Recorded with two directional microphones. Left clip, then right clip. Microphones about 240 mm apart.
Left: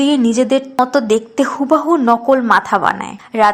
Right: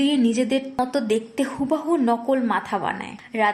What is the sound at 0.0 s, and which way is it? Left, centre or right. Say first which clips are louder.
A woman's voice: left 7 dB; centre.